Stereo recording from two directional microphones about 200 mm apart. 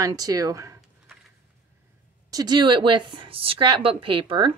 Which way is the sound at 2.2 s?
20° right (ahead or behind).